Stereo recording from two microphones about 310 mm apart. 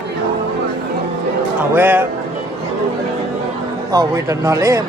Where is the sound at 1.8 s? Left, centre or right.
Centre.